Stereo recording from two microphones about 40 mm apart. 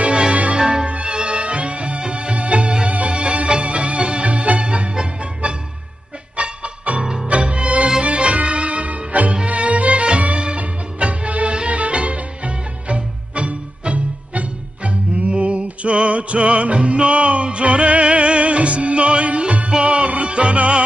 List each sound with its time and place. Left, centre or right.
0.0 s music: right
0.6 s music: right